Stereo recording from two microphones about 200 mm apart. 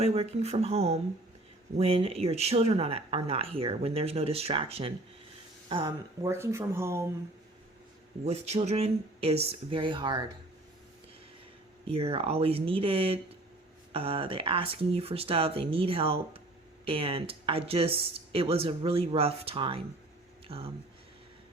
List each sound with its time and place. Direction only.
0.0 s speech: 30° right (ahead or behind)
6.2 s speech: 15° right (ahead or behind)
8.2 s speech: 35° right (ahead or behind)
11.9 s speech: 30° right (ahead or behind)